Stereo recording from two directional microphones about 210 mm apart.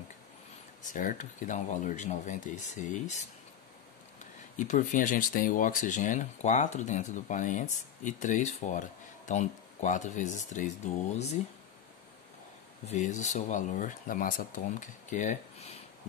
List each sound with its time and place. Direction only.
0.8 s speech: 40° left (ahead or behind)
12.8 s speech: 35° left (ahead or behind)